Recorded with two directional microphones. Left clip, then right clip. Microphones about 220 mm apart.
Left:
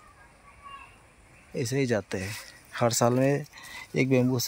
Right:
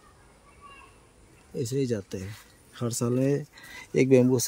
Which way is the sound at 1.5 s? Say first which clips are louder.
Left 2 dB; 10° left (ahead or behind).